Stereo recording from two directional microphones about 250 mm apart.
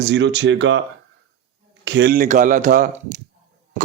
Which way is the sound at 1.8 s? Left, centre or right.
Right.